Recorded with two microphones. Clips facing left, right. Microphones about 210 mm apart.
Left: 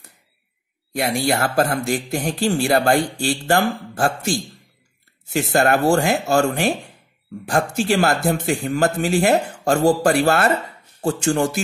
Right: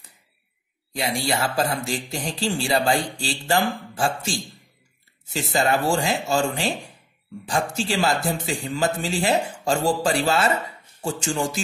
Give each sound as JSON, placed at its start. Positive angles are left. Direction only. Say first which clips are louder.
{"t": 0.9, "sound": "speech", "louder": "left 5 dB", "side_deg": 60}